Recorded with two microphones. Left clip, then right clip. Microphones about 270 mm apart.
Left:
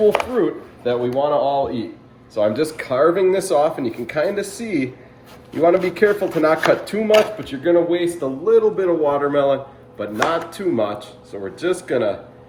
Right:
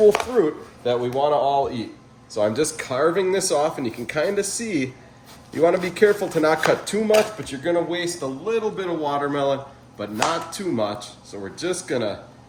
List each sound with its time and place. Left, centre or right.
0.3 s speech: right